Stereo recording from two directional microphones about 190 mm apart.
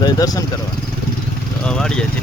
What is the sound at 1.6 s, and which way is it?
Speech, 5° left (ahead or behind).